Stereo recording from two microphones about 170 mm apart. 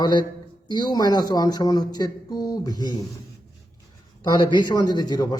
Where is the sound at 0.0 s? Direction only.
25° left (ahead or behind).